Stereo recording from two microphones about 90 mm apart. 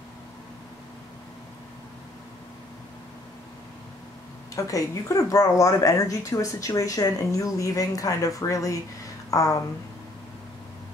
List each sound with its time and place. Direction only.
4.6 s a woman's voice: 40° left (ahead or behind)